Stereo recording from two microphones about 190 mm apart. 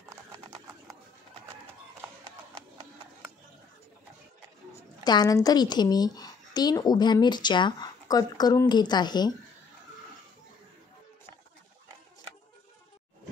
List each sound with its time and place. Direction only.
5.0 s a woman's voice: 20° left (ahead or behind)